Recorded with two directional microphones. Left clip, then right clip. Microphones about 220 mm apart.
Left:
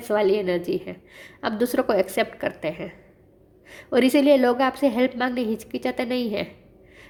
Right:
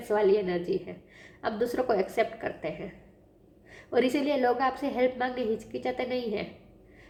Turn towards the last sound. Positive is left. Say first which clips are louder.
# left 5 dB
turn(degrees=50)  # may be behind; listen again after turning